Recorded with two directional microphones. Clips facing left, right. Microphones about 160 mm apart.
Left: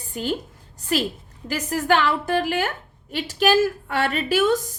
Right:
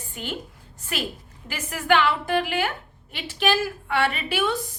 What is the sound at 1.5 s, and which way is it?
A woman's voice, 40° left (ahead or behind).